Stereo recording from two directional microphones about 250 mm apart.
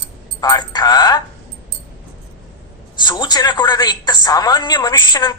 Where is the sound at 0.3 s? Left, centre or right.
Centre.